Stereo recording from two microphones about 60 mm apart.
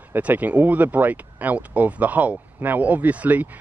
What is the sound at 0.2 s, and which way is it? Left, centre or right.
Speech, right.